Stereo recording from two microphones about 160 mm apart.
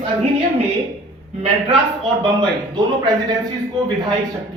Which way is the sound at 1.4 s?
35° right (ahead or behind).